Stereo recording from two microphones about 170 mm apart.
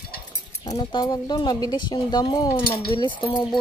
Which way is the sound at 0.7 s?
25° left (ahead or behind).